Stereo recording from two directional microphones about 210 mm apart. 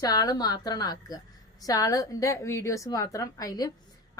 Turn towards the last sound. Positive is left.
turn(degrees=15)  # may be behind; listen again after turning